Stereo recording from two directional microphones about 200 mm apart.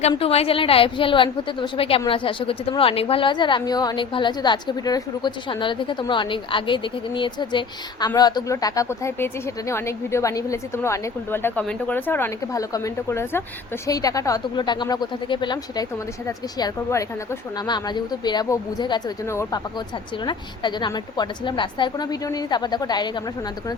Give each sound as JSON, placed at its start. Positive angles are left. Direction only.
{"t": 0.1, "sound": "a woman's voice", "side_deg": 30}